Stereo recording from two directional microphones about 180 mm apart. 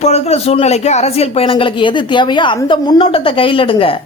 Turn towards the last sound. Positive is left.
turn(degrees=30)  # may be behind; listen again after turning